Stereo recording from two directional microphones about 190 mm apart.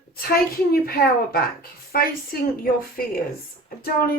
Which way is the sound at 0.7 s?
50° left (ahead or behind).